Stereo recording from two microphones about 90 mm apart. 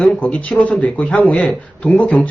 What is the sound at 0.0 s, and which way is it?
Speech, 15° left (ahead or behind).